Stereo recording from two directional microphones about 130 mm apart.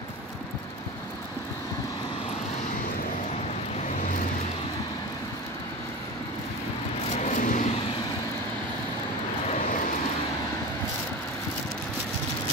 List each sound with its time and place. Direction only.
7.2 s vehicle: 80° left